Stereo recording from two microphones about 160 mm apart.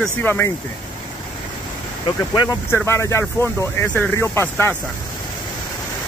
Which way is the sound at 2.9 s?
15° left (ahead or behind).